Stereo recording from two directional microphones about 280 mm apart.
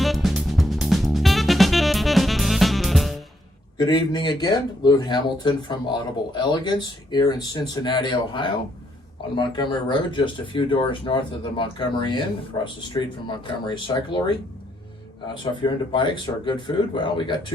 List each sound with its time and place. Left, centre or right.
0.0 s music: centre
3.8 s speech: centre
15.6 s speech: centre